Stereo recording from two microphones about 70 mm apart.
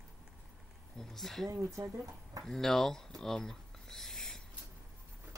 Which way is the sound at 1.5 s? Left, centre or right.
Right.